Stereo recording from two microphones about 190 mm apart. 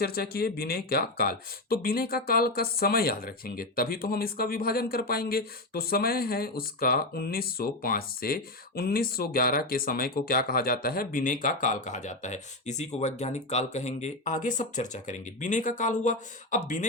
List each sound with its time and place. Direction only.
0.0 s speech: 55° left (ahead or behind)